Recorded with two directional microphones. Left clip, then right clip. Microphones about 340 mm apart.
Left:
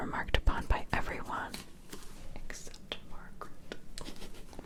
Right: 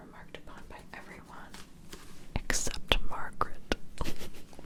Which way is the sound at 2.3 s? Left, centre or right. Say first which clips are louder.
Right 15 dB; right.